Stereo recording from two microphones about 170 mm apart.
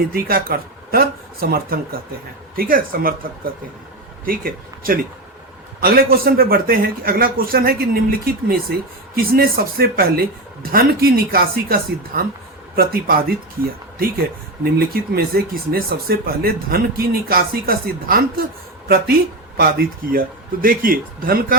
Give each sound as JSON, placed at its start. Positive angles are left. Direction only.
{"t": 0.1, "sound": "speech", "side_deg": -60}
{"t": 4.3, "sound": "speech", "side_deg": -55}
{"t": 14.6, "sound": "speech", "side_deg": -60}